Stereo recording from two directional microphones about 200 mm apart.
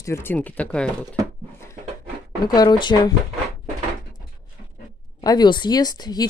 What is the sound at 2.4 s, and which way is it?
Speech, 20° left (ahead or behind).